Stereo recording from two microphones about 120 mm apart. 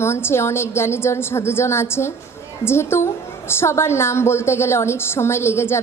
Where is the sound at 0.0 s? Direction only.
20° left (ahead or behind).